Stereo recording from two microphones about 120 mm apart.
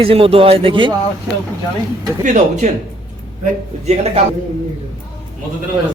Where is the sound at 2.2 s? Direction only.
80° right.